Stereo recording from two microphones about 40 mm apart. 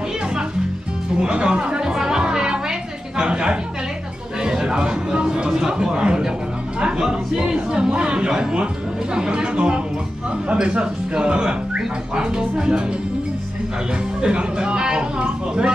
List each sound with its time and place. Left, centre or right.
1.2 s music: right
3.2 s chatter: right
4.4 s a sound: right
6.8 s speech: centre
14.2 s speech: right